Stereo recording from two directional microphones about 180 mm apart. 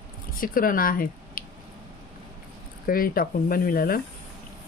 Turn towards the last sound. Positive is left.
turn(degrees=55)  # may be behind; listen again after turning